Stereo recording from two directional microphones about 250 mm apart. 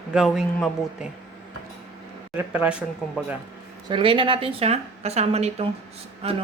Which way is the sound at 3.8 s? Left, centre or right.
Centre.